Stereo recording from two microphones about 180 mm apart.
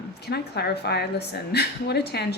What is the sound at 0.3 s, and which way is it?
A woman's voice, 65° left (ahead or behind).